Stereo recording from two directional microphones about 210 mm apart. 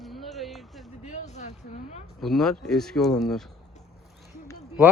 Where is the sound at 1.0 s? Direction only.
35° left (ahead or behind).